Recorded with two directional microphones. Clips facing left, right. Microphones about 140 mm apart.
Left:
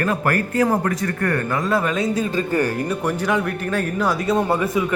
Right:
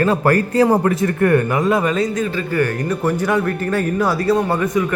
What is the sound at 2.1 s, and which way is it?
Speech, 30° left (ahead or behind).